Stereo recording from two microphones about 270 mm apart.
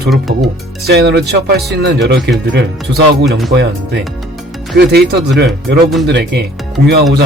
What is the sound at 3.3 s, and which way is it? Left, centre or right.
Speech, centre.